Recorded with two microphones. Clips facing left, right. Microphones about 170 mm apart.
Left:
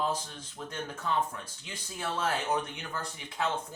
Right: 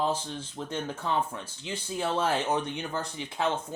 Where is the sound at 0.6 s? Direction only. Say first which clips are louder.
Right 3 dB; 30° right (ahead or behind).